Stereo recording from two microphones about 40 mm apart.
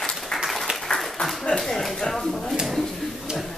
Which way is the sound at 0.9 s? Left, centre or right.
Left.